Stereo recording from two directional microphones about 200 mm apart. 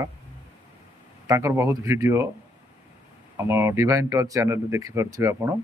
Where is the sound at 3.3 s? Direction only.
15° right (ahead or behind).